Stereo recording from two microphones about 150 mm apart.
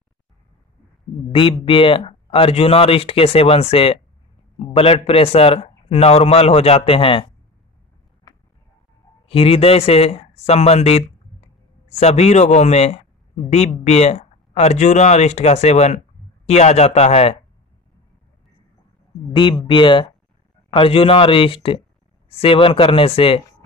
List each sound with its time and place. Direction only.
1.3 s speech: 35° left (ahead or behind)
8.3 s a sound: 25° left (ahead or behind)
9.3 s speech: 40° left (ahead or behind)
19.6 s speech: 35° left (ahead or behind)